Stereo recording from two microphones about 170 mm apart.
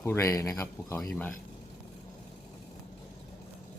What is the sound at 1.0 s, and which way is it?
Speech, 5° left (ahead or behind).